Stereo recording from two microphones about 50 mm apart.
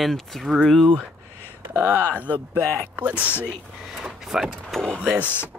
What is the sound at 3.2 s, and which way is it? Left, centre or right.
Speech, left.